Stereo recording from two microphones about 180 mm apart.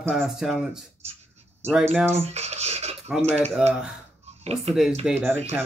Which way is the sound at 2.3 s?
35° right (ahead or behind).